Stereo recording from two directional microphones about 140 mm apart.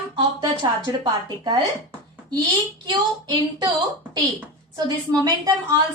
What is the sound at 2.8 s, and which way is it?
Speech, 30° right (ahead or behind).